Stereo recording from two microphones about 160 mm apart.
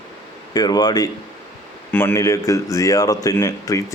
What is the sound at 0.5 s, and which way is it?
Speech, 25° left (ahead or behind).